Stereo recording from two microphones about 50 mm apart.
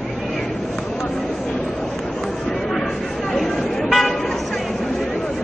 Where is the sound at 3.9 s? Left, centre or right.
Centre.